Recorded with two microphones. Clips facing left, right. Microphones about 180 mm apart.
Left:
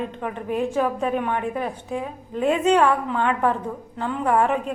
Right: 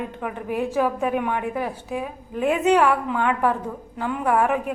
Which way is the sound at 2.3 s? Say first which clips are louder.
Even; 15° right (ahead or behind).